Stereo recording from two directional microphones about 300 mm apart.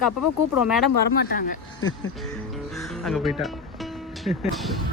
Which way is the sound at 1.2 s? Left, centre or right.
Left.